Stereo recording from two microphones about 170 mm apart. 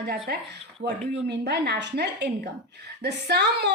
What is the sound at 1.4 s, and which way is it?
A woman's voice, 75° right (ahead or behind).